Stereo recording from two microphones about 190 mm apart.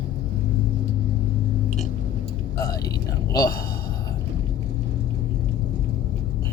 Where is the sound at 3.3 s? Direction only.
20° left (ahead or behind).